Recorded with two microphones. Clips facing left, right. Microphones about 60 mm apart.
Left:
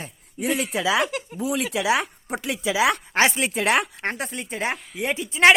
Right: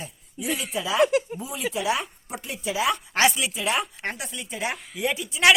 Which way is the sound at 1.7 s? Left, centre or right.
Left.